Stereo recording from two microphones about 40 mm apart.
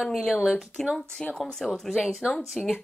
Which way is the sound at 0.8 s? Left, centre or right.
Centre.